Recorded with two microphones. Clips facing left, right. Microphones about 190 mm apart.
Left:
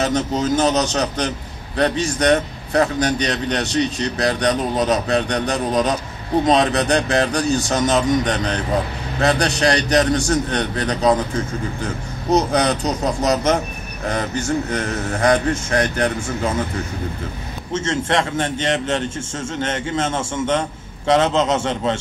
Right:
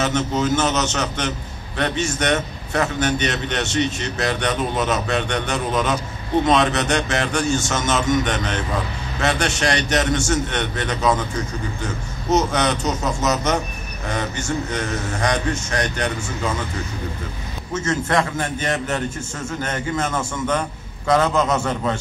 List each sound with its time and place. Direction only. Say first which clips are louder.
0.0 s a man's voice: left 1 dB; 35° left (ahead or behind)
14.7 s a man's voice: left 2 dB; 35° left (ahead or behind)
17.7 s a man's voice: left 1 dB; 25° left (ahead or behind)